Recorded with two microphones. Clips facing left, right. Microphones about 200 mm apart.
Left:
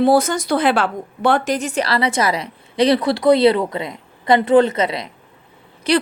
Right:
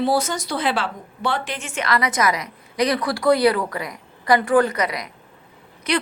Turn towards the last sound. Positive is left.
turn(degrees=30)  # may be behind; listen again after turning